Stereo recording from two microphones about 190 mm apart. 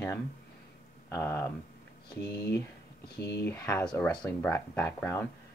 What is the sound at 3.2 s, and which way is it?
Speech, 60° left (ahead or behind).